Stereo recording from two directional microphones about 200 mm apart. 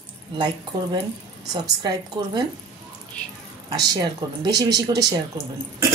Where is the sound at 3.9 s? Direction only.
20° right (ahead or behind).